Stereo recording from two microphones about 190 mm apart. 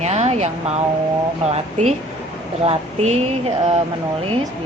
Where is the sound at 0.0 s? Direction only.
35° right (ahead or behind).